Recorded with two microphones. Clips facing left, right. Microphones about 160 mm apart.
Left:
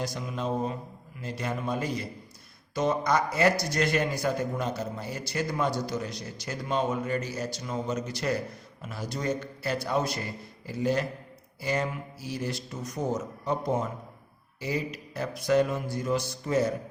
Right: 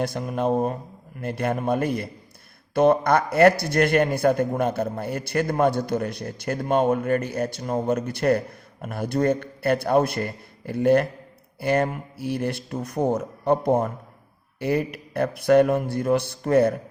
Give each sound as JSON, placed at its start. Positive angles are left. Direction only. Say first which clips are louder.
{"t": 0.0, "sound": "a man's voice", "louder": "right 8 dB", "side_deg": -55}